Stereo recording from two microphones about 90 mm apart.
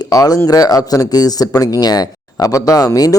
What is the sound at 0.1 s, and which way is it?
A man's voice, 40° left (ahead or behind).